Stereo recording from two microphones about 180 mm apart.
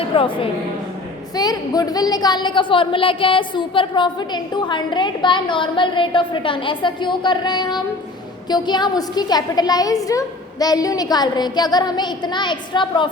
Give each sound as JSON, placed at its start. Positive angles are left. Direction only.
{"t": 0.1, "sound": "a woman's voice", "side_deg": 30}